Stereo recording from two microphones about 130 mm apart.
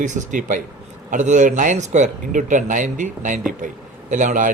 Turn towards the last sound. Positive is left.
turn(degrees=-80)